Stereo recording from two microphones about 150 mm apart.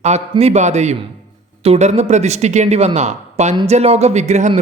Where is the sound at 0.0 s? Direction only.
45° right (ahead or behind).